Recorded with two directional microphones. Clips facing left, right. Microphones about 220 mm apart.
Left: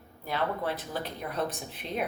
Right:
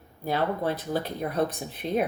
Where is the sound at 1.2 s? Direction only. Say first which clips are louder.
Right 5 dB; 40° right (ahead or behind).